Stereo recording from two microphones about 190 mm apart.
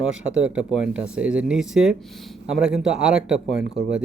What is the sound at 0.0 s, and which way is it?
Speech, 5° right (ahead or behind).